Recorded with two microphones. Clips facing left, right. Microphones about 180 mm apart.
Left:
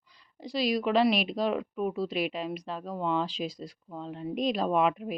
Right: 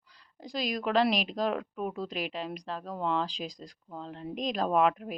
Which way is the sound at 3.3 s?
40° right (ahead or behind).